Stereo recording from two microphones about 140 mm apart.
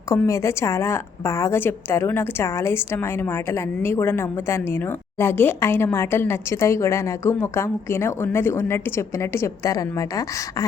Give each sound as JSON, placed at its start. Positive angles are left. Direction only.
{"t": 0.3, "sound": "a woman's voice", "side_deg": 20}